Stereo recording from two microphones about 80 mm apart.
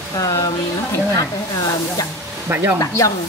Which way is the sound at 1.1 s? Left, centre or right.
Left.